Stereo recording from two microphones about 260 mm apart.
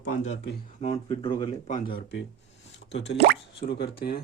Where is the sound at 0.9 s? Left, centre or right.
Centre.